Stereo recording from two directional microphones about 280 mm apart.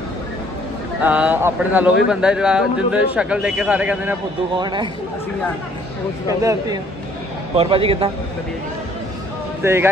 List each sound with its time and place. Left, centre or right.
1.0 s a man's voice: centre
6.2 s a man's voice: centre
9.6 s speech: centre